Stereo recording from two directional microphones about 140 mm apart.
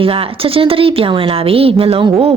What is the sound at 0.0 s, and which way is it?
A woman's voice, 40° right (ahead or behind).